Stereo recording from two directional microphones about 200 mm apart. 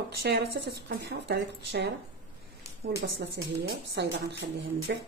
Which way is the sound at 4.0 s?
60° right (ahead or behind).